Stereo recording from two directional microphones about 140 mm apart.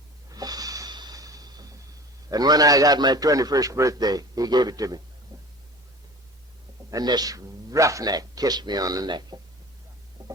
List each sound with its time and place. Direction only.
0.3 s snort: 25° right (ahead or behind)
2.3 s a man's voice: 30° right (ahead or behind)
6.9 s a man's voice: 30° right (ahead or behind)
10.2 s a sound: 25° right (ahead or behind)